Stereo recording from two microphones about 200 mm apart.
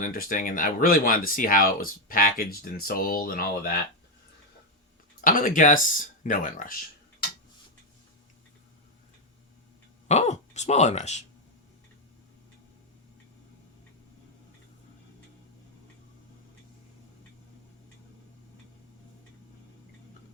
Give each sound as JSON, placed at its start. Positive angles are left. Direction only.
{"t": 0.0, "sound": "speech", "side_deg": 45}
{"t": 5.2, "sound": "speech", "side_deg": 45}
{"t": 10.1, "sound": "speech", "side_deg": 35}